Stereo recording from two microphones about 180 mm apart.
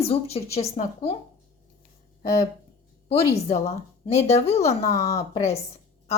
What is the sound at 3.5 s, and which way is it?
Speech, 40° left (ahead or behind).